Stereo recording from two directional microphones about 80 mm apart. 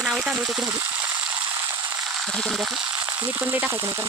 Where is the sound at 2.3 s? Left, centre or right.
Centre.